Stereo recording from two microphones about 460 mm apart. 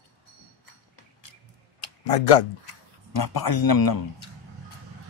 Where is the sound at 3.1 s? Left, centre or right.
Left.